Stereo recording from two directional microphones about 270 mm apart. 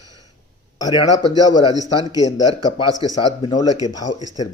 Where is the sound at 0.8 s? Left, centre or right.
Centre.